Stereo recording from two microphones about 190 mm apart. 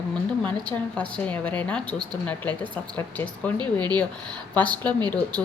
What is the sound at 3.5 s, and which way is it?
Speech, 20° right (ahead or behind).